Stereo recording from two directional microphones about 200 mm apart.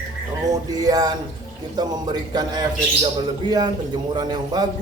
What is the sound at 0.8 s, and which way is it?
A man's voice, 20° right (ahead or behind).